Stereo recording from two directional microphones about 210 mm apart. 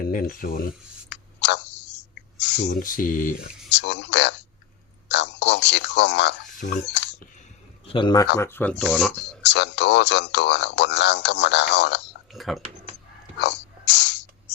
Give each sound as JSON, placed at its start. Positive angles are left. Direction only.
{"t": 0.0, "sound": "speech", "side_deg": 40}
{"t": 1.1, "sound": "a sound", "side_deg": 55}
{"t": 2.4, "sound": "speech", "side_deg": 55}
{"t": 3.7, "sound": "speech", "side_deg": 55}
{"t": 5.0, "sound": "a sound", "side_deg": 55}
{"t": 7.9, "sound": "speech", "side_deg": 20}
{"t": 9.4, "sound": "speech", "side_deg": 55}
{"t": 12.3, "sound": "speech", "side_deg": 0}
{"t": 13.4, "sound": "a sound", "side_deg": 55}